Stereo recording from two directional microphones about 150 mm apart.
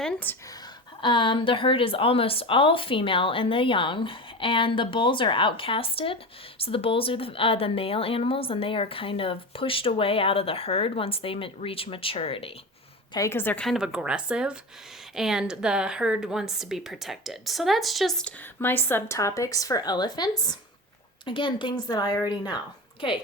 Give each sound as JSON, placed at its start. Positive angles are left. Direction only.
{"t": 0.0, "sound": "speech", "side_deg": 10}
{"t": 1.0, "sound": "a woman's voice", "side_deg": 35}
{"t": 13.1, "sound": "a woman's voice", "side_deg": 20}
{"t": 13.7, "sound": "a woman's voice", "side_deg": -5}